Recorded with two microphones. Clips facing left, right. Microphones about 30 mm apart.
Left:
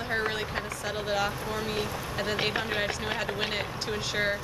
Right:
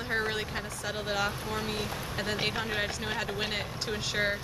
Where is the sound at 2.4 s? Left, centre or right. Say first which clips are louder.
Left 2 dB; centre.